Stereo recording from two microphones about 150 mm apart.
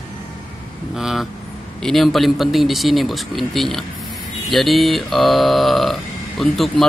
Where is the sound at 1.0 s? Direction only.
5° right (ahead or behind).